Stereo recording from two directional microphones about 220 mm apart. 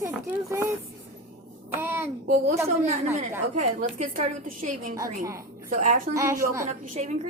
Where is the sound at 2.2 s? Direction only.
40° right (ahead or behind).